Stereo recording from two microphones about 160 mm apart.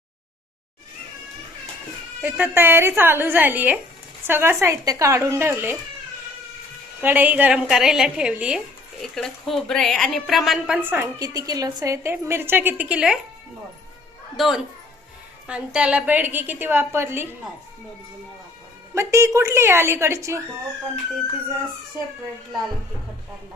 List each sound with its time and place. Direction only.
2.2 s a woman's voice: 10° right (ahead or behind)
7.0 s a woman's voice: 10° right (ahead or behind)
14.3 s a child's voice: centre (ahead or behind)
18.9 s a woman's voice: 20° right (ahead or behind)